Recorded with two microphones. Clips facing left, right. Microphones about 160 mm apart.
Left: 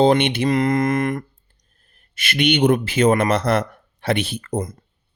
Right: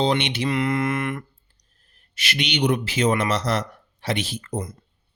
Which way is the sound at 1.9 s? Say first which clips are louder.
Left 2 dB; 55° left (ahead or behind).